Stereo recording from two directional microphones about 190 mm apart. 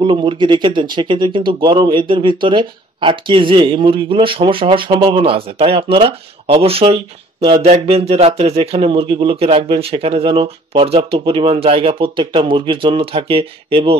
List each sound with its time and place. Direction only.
0.0 s speech: 25° right (ahead or behind)